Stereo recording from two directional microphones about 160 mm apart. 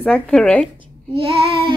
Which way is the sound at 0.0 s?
5° left (ahead or behind).